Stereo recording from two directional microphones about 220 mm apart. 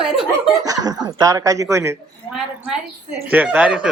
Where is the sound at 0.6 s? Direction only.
15° right (ahead or behind).